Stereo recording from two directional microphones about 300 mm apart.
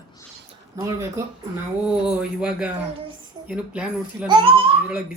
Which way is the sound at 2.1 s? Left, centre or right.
Centre.